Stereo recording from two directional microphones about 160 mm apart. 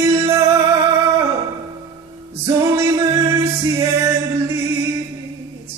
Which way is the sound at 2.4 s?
20° right (ahead or behind).